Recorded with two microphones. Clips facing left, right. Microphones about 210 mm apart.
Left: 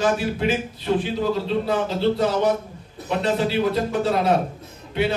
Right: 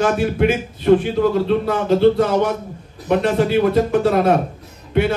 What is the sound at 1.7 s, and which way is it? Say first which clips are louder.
Music: right 8 dB; 55° right (ahead or behind).